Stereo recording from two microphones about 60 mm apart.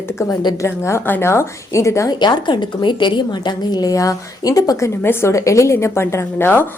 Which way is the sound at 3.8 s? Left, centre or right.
Left.